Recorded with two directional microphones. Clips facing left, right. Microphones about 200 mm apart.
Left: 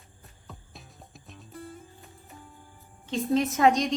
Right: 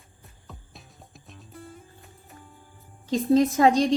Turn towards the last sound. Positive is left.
turn(degrees=-30)  # may be behind; listen again after turning